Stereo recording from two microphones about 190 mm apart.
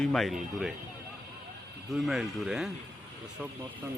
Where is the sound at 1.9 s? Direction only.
Centre (ahead or behind).